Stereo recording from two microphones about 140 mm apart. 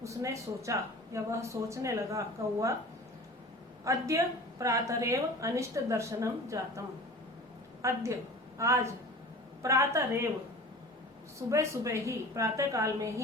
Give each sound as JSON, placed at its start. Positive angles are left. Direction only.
{"t": 0.0, "sound": "a woman's voice", "side_deg": -20}
{"t": 3.8, "sound": "a woman's voice", "side_deg": -20}
{"t": 11.3, "sound": "a woman's voice", "side_deg": -20}